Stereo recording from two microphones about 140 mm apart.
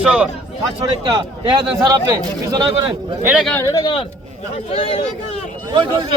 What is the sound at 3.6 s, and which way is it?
Speech, 25° left (ahead or behind).